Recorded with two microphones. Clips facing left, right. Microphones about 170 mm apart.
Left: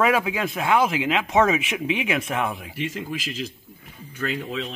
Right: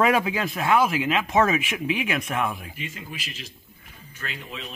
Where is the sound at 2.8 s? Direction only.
90° left.